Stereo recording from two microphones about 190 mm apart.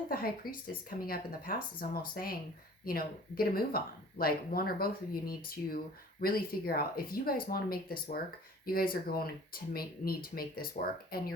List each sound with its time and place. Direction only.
0.1 s speech: 50° left (ahead or behind)